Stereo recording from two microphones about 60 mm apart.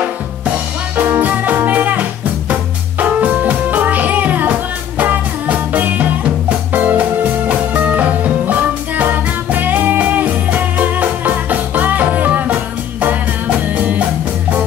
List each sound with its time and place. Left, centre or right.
0.9 s music: right